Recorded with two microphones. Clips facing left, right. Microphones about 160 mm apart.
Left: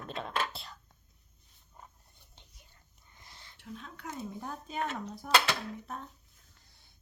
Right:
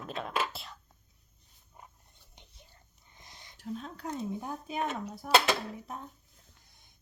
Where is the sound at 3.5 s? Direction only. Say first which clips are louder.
Right 7 dB; 35° right (ahead or behind).